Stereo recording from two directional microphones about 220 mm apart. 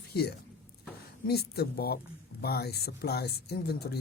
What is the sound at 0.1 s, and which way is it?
A man's voice, 45° left (ahead or behind).